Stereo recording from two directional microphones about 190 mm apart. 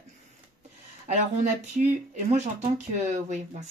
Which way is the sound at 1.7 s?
40° right (ahead or behind).